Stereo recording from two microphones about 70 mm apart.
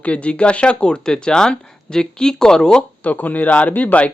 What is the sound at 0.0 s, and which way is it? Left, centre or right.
Speech, centre.